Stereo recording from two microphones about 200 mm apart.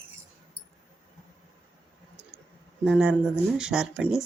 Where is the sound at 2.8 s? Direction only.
5° right (ahead or behind).